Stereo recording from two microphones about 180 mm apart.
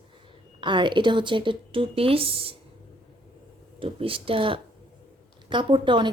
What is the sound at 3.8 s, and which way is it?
A woman's voice, 30° right (ahead or behind).